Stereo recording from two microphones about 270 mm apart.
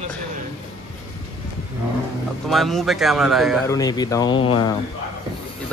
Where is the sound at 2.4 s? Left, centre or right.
Centre.